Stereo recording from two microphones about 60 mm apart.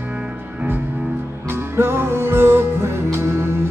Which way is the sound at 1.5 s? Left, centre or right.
Right.